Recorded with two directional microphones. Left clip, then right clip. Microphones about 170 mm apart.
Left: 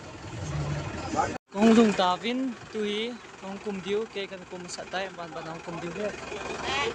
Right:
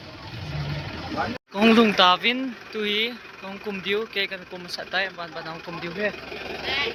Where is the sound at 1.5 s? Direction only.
15° left (ahead or behind).